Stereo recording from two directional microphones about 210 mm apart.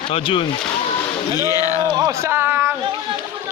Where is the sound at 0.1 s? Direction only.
25° left (ahead or behind).